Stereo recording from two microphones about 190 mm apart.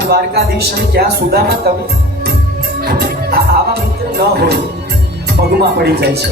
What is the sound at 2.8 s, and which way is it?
Music, 55° right (ahead or behind).